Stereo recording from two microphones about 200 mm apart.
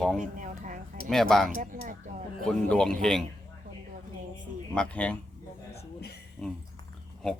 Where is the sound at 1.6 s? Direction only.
40° right (ahead or behind).